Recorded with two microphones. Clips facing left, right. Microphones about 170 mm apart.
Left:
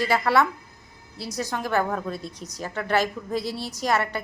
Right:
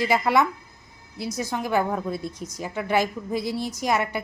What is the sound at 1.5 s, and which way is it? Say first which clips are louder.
A woman's voice: right 1 dB; 10° right (ahead or behind).